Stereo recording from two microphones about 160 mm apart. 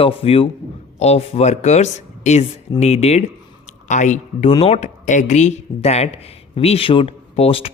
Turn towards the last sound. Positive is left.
turn(degrees=35)  # may be behind; listen again after turning